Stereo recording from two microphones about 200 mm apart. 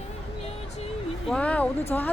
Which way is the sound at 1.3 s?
5° left (ahead or behind).